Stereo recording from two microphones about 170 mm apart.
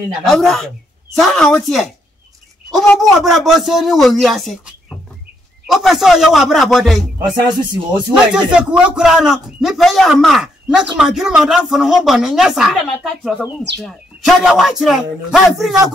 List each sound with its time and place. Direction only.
0.3 s a man's voice: centre (ahead or behind)
7.2 s music: 25° right (ahead or behind)
8.3 s a man's voice: 5° right (ahead or behind)